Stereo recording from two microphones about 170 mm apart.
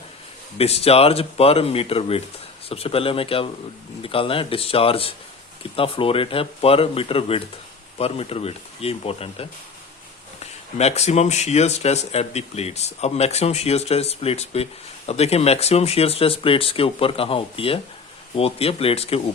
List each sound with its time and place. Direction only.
0.6 s speech: 35° left (ahead or behind)